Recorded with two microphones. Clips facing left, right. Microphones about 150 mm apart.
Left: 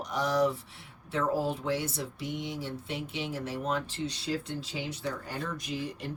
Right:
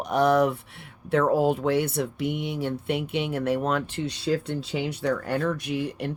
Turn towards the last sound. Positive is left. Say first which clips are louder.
# right 7 dB
turn(degrees=-65)  # may be behind; listen again after turning